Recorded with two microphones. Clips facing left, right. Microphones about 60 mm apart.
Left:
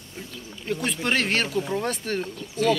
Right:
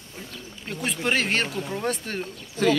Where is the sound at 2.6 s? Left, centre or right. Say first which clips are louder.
Even; right.